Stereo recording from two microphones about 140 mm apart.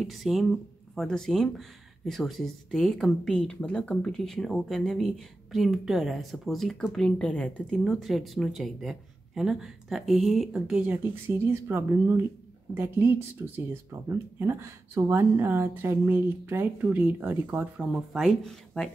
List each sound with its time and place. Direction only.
0.0 s speech: centre (ahead or behind)